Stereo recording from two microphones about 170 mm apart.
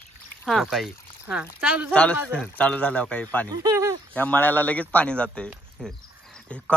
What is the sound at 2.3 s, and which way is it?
Speech, 5° left (ahead or behind).